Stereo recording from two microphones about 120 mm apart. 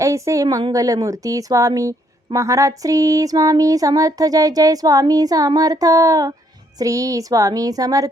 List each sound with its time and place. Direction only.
0.0 s speech: 25° right (ahead or behind)
0.4 s a woman's voice: 40° right (ahead or behind)
0.7 s speech: 30° right (ahead or behind)